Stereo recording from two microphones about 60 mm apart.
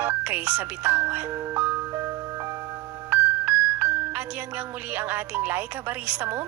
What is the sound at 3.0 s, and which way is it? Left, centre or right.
Music, right.